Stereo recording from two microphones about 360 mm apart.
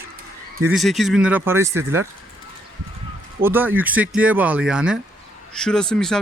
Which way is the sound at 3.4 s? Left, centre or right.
Centre.